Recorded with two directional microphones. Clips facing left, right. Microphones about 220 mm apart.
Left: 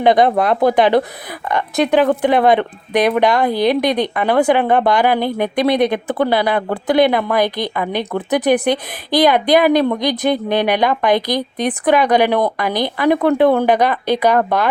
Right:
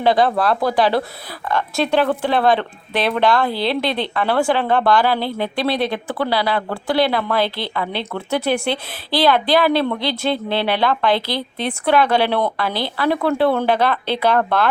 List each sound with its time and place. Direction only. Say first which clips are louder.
0.0 s speech: left 3 dB; 20° left (ahead or behind)